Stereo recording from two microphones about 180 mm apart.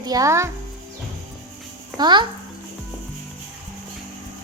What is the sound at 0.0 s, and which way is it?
Speech, 20° right (ahead or behind).